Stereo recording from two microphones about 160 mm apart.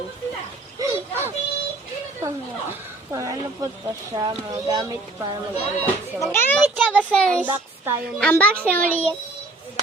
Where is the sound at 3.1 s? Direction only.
20° right (ahead or behind).